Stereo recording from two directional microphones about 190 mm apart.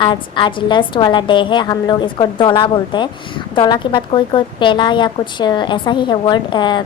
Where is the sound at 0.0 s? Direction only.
25° left (ahead or behind).